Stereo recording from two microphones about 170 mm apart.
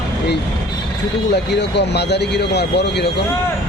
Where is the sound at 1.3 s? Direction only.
85° left.